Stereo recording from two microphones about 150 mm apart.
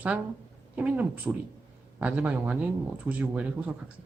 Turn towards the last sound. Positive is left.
turn(degrees=-10)  # may be behind; listen again after turning